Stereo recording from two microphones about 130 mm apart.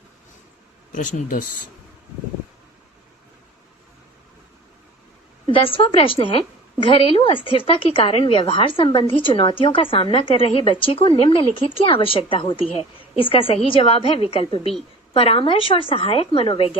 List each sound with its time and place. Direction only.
0.9 s speech: 80° left
5.5 s a woman's voice: 45° left (ahead or behind)